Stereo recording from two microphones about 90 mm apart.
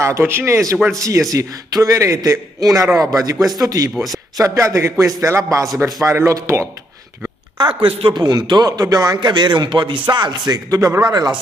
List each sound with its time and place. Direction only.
0.0 s speech: 30° right (ahead or behind)
3.9 s a man's voice: centre (ahead or behind)
4.6 s speech: 30° right (ahead or behind)
7.5 s speech: 70° right (ahead or behind)
8.2 s speech: 50° right (ahead or behind)
11.1 s speech: 50° right (ahead or behind)